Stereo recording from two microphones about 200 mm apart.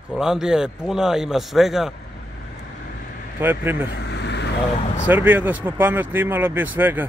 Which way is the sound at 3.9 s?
60° left (ahead or behind).